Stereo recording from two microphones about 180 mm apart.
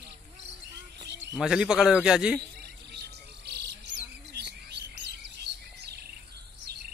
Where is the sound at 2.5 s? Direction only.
65° right (ahead or behind).